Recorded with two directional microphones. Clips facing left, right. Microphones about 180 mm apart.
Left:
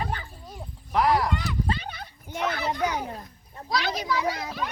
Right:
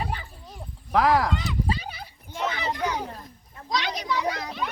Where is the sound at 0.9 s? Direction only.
90° right.